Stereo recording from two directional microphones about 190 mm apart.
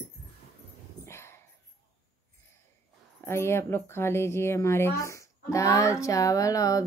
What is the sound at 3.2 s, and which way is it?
Speech, 15° left (ahead or behind).